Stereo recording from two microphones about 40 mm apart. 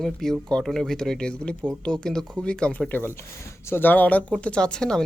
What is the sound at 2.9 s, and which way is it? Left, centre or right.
Speech, left.